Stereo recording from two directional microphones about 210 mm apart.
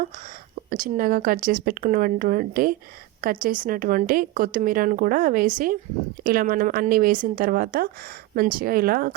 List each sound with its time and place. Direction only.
0.7 s speech: 40° right (ahead or behind)